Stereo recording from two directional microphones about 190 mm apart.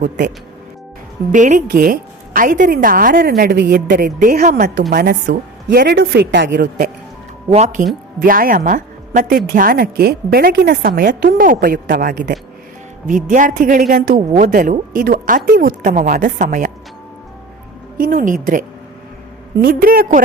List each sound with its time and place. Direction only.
1.3 s a woman's voice: 40° right (ahead or behind); by 4.9 s 60° right (ahead or behind)
4.9 s a woman's voice: 50° right (ahead or behind)
5.2 s a woman's voice: 60° right (ahead or behind)
7.5 s a woman's voice: 40° right (ahead or behind)
17.9 s speech: 50° right (ahead or behind)
19.5 s a woman's voice: 50° right (ahead or behind)